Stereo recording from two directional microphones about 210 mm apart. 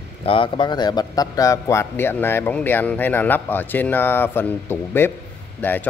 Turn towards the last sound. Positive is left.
turn(degrees=10)  # may be behind; listen again after turning